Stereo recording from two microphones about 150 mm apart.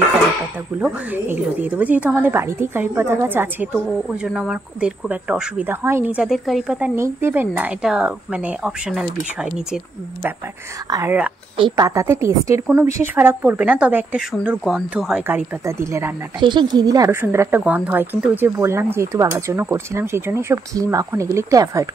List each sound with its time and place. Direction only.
0.7 s a woman's voice: 10° right (ahead or behind)
7.0 s a woman's voice: 15° right (ahead or behind)
11.1 s a woman's voice: 10° right (ahead or behind)
11.5 s a woman's voice: 30° right (ahead or behind); by 15.2 s 5° right (ahead or behind)
15.2 s a woman's voice: 15° right (ahead or behind)
16.3 s a woman's voice: 30° right (ahead or behind)